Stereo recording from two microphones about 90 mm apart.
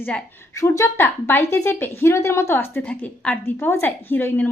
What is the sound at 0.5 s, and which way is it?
A woman's voice, 35° left (ahead or behind).